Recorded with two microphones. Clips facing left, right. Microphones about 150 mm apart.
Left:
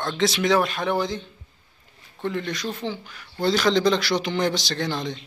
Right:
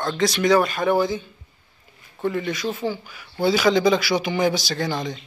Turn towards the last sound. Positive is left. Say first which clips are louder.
# right 2 dB
turn(degrees=0)  # may be behind; listen again after turning